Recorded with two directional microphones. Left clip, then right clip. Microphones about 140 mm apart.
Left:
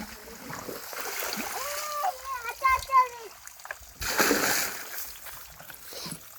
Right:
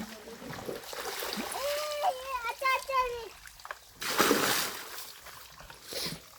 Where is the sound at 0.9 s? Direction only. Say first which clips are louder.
Left 4 dB; 25° left (ahead or behind).